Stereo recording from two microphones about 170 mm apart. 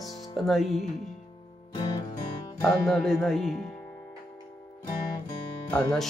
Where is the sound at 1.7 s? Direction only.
25° left (ahead or behind).